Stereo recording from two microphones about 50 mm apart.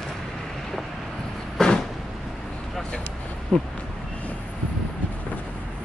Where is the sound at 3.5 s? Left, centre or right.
Centre.